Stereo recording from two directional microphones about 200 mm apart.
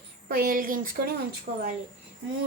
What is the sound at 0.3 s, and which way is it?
Speech, 50° right (ahead or behind).